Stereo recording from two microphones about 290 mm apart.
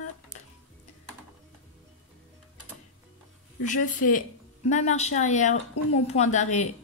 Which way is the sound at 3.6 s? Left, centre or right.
Left.